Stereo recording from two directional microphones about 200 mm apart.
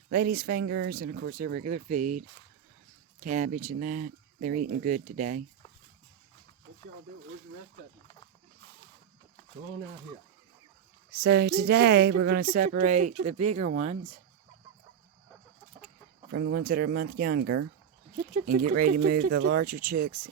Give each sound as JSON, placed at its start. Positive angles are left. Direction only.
{"t": 0.1, "sound": "speech", "side_deg": -50}
{"t": 11.1, "sound": "speech", "side_deg": -55}
{"t": 16.3, "sound": "speech", "side_deg": -50}